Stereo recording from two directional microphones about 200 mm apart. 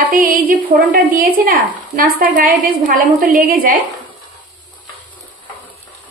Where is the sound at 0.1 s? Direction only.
45° right (ahead or behind).